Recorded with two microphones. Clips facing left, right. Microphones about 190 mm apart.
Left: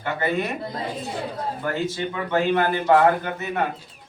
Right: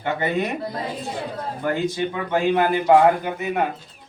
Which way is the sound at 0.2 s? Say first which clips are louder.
Left 2 dB; 20° right (ahead or behind).